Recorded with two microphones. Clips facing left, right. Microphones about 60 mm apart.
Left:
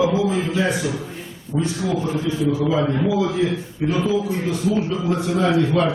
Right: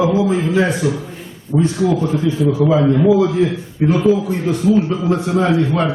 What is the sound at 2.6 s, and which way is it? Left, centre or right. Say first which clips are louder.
Speech: right 9 dB; centre.